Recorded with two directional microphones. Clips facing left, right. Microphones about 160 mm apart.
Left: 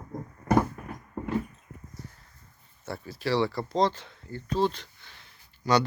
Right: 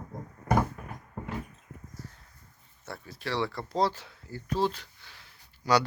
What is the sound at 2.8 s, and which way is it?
Speech, centre (ahead or behind).